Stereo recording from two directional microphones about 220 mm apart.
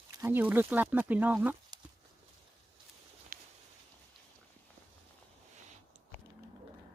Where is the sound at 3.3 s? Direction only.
40° right (ahead or behind).